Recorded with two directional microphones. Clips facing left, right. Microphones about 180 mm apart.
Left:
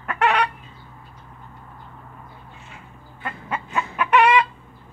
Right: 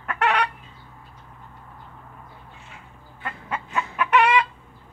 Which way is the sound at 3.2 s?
15° left (ahead or behind).